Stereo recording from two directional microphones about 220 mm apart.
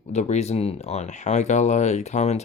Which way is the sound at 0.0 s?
30° left (ahead or behind).